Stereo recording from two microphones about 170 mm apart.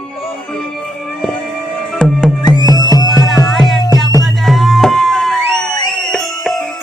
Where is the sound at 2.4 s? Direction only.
25° left (ahead or behind).